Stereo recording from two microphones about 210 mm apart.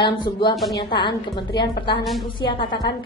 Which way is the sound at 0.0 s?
20° left (ahead or behind).